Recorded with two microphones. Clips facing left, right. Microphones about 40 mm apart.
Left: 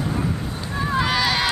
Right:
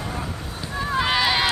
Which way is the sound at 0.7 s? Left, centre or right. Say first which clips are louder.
Left 1 dB; centre.